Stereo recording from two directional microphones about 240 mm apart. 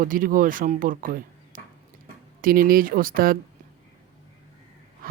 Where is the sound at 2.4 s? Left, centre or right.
Right.